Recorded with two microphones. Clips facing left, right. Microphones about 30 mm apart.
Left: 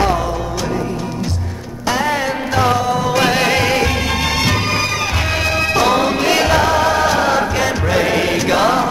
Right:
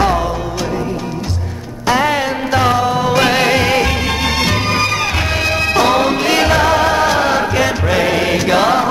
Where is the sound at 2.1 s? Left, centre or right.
Centre.